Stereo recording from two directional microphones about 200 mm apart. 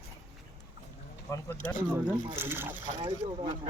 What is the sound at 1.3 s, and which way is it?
Speech, 15° left (ahead or behind).